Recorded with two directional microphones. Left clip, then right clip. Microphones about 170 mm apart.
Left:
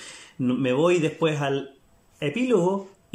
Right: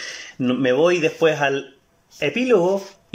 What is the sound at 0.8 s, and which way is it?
Speech, 35° left (ahead or behind).